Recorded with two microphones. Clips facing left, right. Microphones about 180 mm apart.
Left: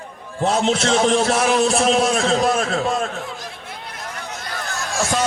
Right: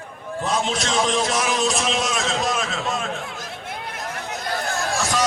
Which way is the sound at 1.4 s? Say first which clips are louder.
Left 6 dB; 50° left (ahead or behind).